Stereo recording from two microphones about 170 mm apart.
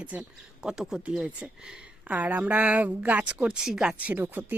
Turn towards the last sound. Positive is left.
turn(degrees=-10)  # may be behind; listen again after turning